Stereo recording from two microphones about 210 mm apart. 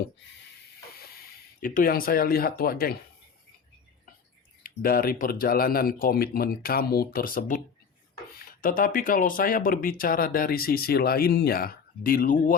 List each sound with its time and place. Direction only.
1.6 s speech: 40° left (ahead or behind)
4.6 s speech: 45° left (ahead or behind)